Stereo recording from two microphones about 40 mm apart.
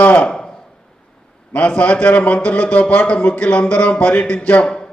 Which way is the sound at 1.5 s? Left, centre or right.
Left.